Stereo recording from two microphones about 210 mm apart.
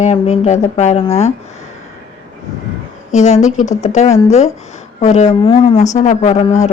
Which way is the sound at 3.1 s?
35° left (ahead or behind).